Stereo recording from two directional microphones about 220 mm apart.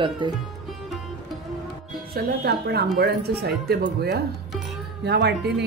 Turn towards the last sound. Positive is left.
turn(degrees=-50)  # may be behind; listen again after turning